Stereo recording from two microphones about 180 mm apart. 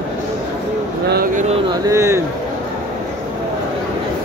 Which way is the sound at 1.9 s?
15° right (ahead or behind).